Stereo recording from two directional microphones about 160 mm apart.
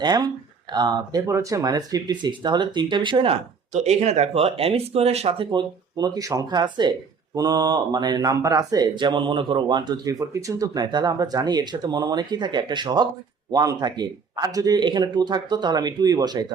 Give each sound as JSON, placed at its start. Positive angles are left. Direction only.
{"t": 0.0, "sound": "speech", "side_deg": -25}
{"t": 3.7, "sound": "speech", "side_deg": -45}